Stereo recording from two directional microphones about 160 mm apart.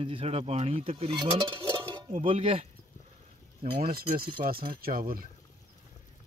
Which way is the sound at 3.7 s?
70° right (ahead or behind).